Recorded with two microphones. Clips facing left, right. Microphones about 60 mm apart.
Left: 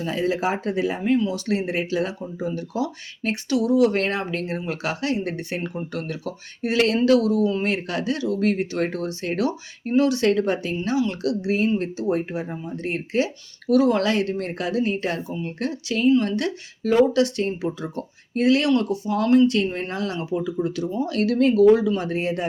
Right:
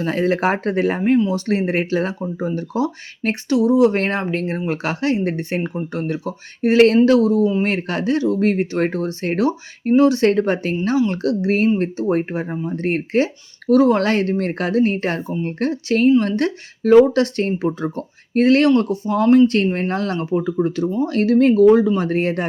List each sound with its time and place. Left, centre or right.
0.0 s speech: right
1.2 s speech: right
19.8 s speech: right